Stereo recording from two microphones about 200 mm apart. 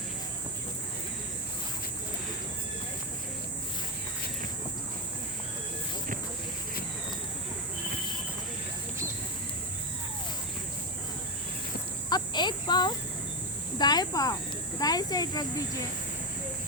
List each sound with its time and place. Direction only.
12.0 s cricket: 20° left (ahead or behind)
14.8 s speech: 20° left (ahead or behind)